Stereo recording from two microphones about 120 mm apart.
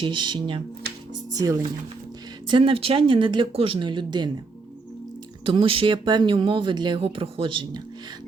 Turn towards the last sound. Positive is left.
turn(degrees=-40)  # may be behind; listen again after turning